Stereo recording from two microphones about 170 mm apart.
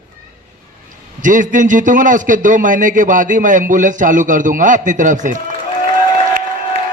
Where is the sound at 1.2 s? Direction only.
50° right (ahead or behind).